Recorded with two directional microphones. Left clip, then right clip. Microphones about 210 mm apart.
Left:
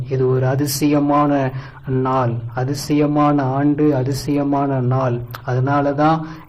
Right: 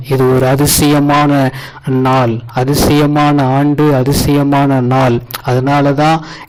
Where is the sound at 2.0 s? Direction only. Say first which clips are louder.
Right 7 dB; 40° right (ahead or behind).